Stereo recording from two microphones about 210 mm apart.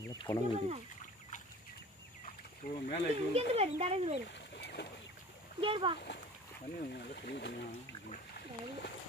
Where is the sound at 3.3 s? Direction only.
30° right (ahead or behind).